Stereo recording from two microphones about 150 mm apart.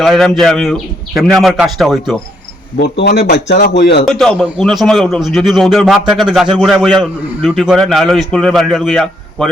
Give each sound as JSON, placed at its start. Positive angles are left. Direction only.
{"t": 0.0, "sound": "a man's voice", "side_deg": 0}
{"t": 2.8, "sound": "a man's voice", "side_deg": 90}
{"t": 4.0, "sound": "a man's voice", "side_deg": 5}